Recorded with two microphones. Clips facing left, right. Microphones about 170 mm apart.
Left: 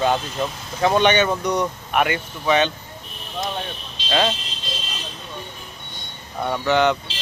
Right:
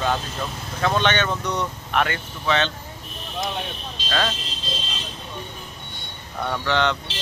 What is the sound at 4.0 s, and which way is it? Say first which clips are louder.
Vehicle: left 5 dB; 45° right (ahead or behind).